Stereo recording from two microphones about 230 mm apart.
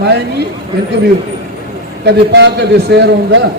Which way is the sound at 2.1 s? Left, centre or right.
Right.